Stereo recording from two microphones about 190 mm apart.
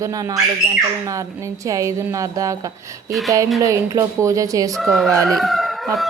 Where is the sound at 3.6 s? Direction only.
15° right (ahead or behind).